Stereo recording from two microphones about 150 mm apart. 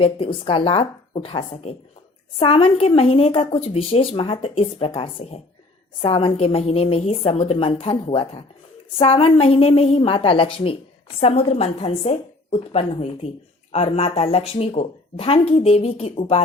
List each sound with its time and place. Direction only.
0.0 s a woman's voice: 40° left (ahead or behind)